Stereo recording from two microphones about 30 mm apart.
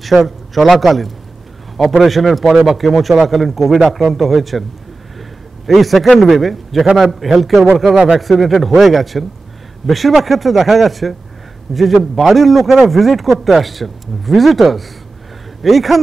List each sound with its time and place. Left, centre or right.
0.2 s speech: centre
5.7 s speech: centre